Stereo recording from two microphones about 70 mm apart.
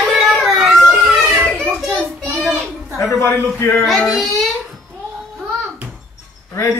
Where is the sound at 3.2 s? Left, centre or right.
Left.